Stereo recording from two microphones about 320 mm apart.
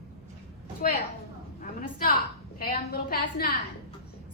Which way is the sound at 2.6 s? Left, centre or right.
Left.